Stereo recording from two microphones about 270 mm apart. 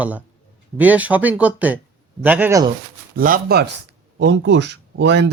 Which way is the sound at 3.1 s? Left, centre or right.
Right.